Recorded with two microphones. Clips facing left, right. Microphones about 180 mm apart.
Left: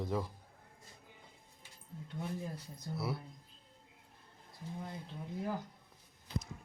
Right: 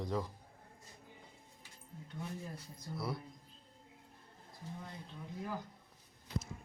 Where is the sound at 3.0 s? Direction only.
5° left (ahead or behind).